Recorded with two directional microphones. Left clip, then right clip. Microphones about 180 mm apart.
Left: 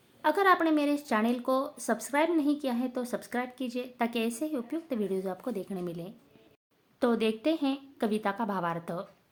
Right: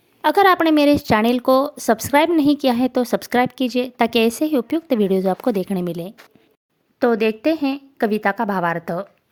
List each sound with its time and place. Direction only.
0.2 s a woman's voice: 55° right (ahead or behind)
7.0 s a woman's voice: 35° right (ahead or behind)